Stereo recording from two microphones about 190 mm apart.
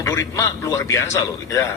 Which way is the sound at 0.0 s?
15° left (ahead or behind).